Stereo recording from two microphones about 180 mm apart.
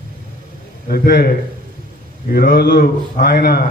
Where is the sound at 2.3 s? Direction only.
60° left (ahead or behind).